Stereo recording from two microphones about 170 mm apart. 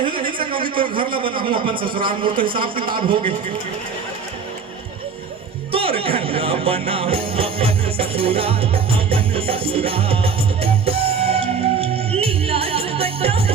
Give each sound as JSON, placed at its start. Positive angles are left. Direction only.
{"t": 0.1, "sound": "a sound", "side_deg": -30}
{"t": 0.8, "sound": "a man's voice", "side_deg": -30}
{"t": 5.7, "sound": "jingle bell", "side_deg": -35}